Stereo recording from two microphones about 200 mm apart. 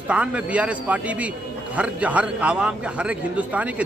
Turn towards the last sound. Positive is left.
turn(degrees=-5)  # may be behind; listen again after turning